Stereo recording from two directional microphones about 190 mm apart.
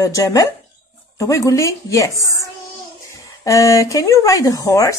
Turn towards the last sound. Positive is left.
turn(degrees=15)  # may be behind; listen again after turning